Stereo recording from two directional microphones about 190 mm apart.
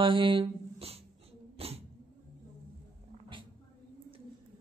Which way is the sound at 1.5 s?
30° right (ahead or behind).